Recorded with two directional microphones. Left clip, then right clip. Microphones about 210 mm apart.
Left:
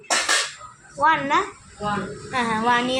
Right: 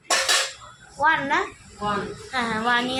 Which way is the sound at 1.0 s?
10° left (ahead or behind).